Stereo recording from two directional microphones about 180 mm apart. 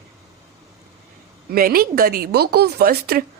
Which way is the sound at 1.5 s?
55° right (ahead or behind).